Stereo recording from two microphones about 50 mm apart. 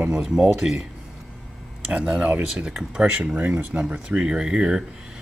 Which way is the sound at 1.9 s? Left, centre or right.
Right.